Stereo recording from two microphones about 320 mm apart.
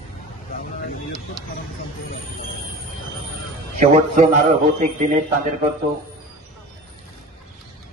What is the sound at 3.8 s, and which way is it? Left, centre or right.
Speech, right.